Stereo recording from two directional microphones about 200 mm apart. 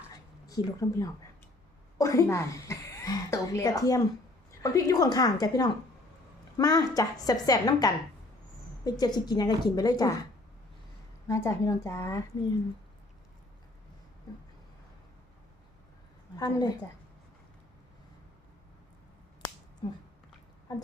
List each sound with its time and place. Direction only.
0.4 s a woman's voice: 15° left (ahead or behind)
11.3 s a woman's voice: 15° left (ahead or behind)
16.4 s a woman's voice: 20° left (ahead or behind)